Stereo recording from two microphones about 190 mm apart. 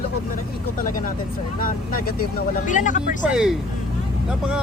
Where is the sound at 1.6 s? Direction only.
50° left (ahead or behind).